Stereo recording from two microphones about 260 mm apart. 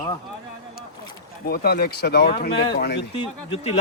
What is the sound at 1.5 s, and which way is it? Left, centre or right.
Speech, left.